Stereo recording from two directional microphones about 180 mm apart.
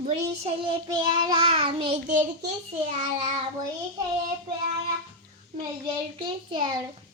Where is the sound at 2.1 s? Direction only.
40° right (ahead or behind).